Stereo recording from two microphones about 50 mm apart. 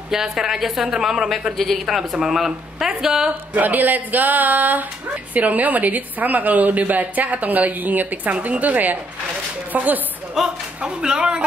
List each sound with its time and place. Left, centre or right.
0.1 s speech: centre
1.6 s speech: centre
3.3 s a woman's voice: right
10.4 s speech: centre